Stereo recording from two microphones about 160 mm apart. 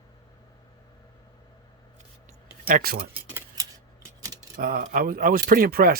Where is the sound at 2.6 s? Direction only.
70° right (ahead or behind).